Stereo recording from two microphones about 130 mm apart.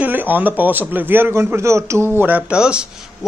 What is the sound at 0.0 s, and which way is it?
A man's voice, 15° right (ahead or behind).